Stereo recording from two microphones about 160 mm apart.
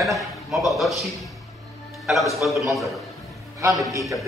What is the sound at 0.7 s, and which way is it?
Speech, centre (ahead or behind).